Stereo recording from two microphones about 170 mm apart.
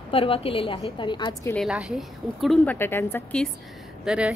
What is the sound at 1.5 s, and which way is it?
A woman's voice, centre (ahead or behind).